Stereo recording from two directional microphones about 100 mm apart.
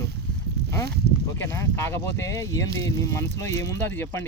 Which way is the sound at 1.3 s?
30° left (ahead or behind).